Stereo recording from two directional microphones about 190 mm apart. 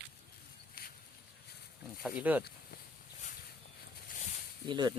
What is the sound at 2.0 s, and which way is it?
Speech, 10° right (ahead or behind).